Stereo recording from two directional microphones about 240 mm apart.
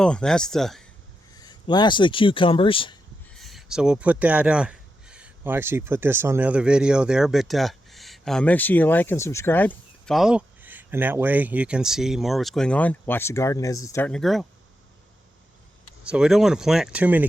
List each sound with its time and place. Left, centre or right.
0.0 s speech: centre
1.4 s speech: centre
3.3 s speech: centre
16.0 s speech: centre